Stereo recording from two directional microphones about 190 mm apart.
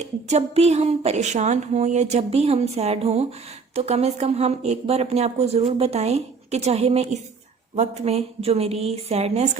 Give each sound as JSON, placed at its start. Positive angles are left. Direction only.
{"t": 0.0, "sound": "speech", "side_deg": -35}